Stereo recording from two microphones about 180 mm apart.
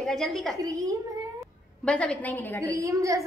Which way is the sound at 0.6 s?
20° right (ahead or behind).